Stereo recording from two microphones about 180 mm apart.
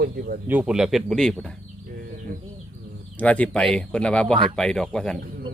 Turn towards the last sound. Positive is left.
turn(degrees=5)  # may be behind; listen again after turning